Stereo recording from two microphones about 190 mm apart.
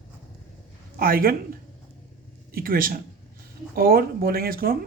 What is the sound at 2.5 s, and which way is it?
Speech, 50° right (ahead or behind).